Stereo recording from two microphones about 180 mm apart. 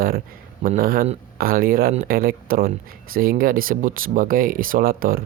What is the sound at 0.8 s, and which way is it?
Speech, 50° right (ahead or behind).